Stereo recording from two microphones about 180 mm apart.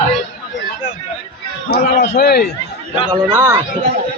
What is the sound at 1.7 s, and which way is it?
Speech, 65° left (ahead or behind).